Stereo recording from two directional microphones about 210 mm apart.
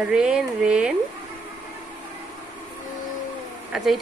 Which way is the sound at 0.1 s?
5° right (ahead or behind).